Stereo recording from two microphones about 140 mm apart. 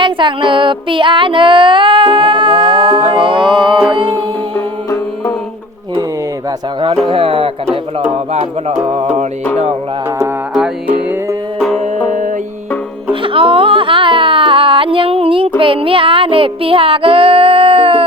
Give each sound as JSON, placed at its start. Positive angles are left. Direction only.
{"t": 0.0, "sound": "music", "side_deg": -35}
{"t": 4.5, "sound": "music", "side_deg": 20}
{"t": 7.1, "sound": "speech", "side_deg": -40}
{"t": 13.2, "sound": "music", "side_deg": -40}